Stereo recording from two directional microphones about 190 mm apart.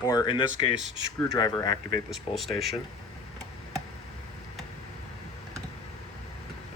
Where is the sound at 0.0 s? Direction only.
20° left (ahead or behind).